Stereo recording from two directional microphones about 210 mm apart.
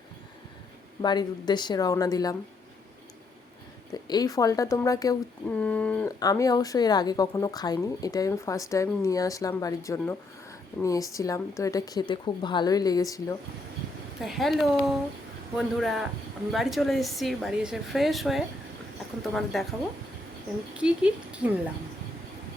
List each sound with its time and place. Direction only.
1.0 s a woman's voice: 20° left (ahead or behind)
3.9 s speech: 20° left (ahead or behind)
5.5 s a woman's voice: 5° left (ahead or behind)
6.1 s speech: 15° left (ahead or behind)
14.2 s a woman's voice: centre (ahead or behind)
20.7 s a woman's voice: 5° right (ahead or behind)